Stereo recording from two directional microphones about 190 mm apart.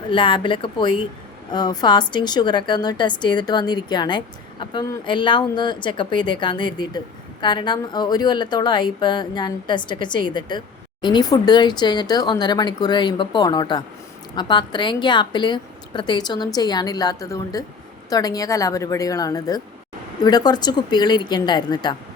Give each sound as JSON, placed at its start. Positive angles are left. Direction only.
{"t": 0.1, "sound": "a woman's voice", "side_deg": 25}